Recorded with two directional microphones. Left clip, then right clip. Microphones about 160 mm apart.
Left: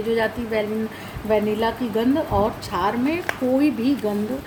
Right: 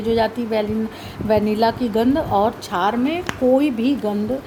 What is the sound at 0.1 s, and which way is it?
A woman's voice, 55° right (ahead or behind).